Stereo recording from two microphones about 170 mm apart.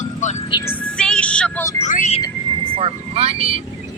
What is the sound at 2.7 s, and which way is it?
Vehicle, 35° right (ahead or behind).